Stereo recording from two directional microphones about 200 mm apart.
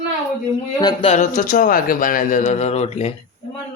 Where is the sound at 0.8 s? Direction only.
25° left (ahead or behind).